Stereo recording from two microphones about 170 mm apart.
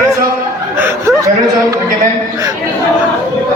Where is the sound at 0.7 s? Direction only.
15° right (ahead or behind).